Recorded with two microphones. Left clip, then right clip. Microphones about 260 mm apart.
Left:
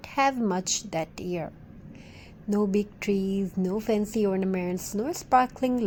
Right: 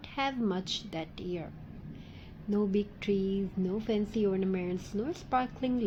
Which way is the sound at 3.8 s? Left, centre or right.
Left.